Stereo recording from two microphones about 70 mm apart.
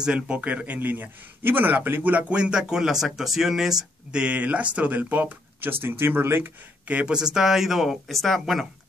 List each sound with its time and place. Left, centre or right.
0.0 s a man's voice: centre; by 6.5 s right
6.9 s speech: centre